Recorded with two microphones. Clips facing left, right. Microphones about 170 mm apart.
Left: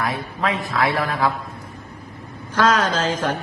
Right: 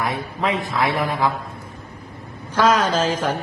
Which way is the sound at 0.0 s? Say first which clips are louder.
Even; 20° right (ahead or behind).